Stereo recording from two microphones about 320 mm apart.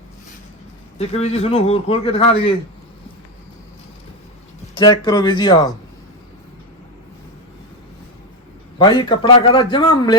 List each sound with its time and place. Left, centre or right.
0.9 s a man's voice: centre
4.7 s a man's voice: centre
8.8 s a man's voice: centre